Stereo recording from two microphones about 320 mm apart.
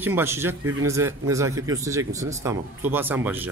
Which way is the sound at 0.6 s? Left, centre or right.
Right.